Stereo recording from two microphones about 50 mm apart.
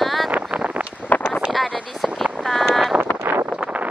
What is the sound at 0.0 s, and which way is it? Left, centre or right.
Vehicle, centre.